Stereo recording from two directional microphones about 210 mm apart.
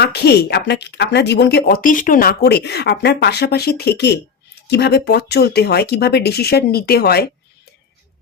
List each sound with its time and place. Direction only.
0.0 s speech: 50° left (ahead or behind)